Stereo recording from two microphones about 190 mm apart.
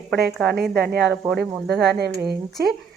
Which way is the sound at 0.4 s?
55° right (ahead or behind).